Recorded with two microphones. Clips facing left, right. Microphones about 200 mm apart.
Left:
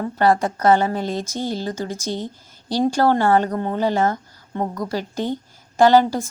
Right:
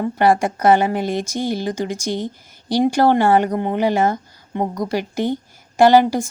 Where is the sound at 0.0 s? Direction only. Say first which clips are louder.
Right 2 dB; 10° right (ahead or behind).